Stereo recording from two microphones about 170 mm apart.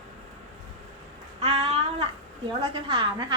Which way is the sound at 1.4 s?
35° right (ahead or behind).